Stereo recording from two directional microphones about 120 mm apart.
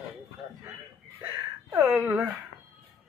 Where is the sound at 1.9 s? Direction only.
10° right (ahead or behind).